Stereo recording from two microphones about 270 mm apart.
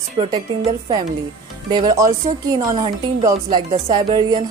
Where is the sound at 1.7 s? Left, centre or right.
Centre.